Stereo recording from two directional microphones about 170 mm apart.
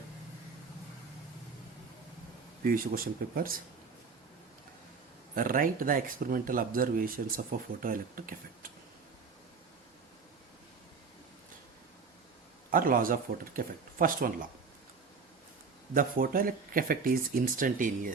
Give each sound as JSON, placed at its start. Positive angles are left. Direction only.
{"t": 2.6, "sound": "speech", "side_deg": -60}
{"t": 5.3, "sound": "speech", "side_deg": -55}
{"t": 12.7, "sound": "speech", "side_deg": -55}
{"t": 16.0, "sound": "speech", "side_deg": -55}